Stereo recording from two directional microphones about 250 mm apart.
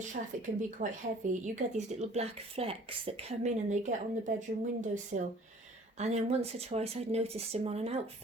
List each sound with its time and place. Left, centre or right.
0.2 s speech: right